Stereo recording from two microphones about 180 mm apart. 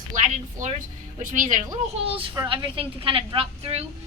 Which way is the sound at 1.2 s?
45° right (ahead or behind).